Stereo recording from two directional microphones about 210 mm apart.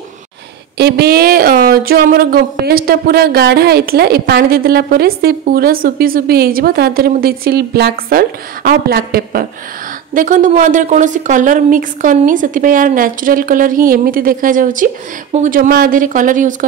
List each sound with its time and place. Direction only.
0.7 s a woman's voice: 50° right (ahead or behind)